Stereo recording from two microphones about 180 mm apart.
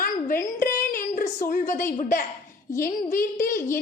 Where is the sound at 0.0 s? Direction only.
50° left (ahead or behind).